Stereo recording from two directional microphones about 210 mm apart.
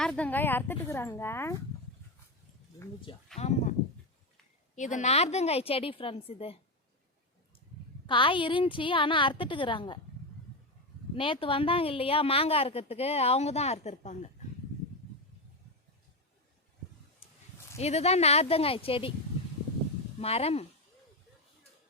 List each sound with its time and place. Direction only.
0.0 s speech: 5° left (ahead or behind)
3.3 s speech: 35° left (ahead or behind)
8.0 s speech: 25° left (ahead or behind)
11.1 s speech: 25° left (ahead or behind)
17.7 s speech: 30° left (ahead or behind)
20.1 s speech: 30° left (ahead or behind)